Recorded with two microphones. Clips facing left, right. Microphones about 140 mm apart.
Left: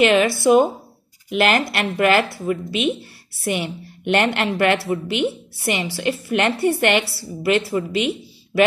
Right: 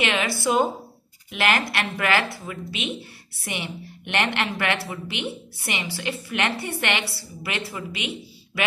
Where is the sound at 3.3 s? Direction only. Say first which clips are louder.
Left 9 dB; 35° left (ahead or behind).